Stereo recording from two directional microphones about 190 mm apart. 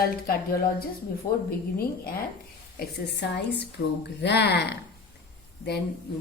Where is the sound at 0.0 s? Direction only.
50° left (ahead or behind).